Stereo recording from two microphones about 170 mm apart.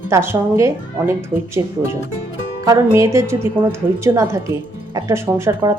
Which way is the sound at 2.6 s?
15° right (ahead or behind).